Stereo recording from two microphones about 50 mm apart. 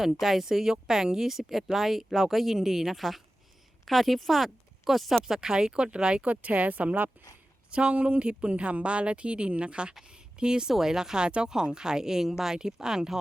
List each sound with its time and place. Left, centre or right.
0.1 s speech: centre
5.2 s speech: centre
6.2 s a woman's voice: right
7.7 s a woman's voice: right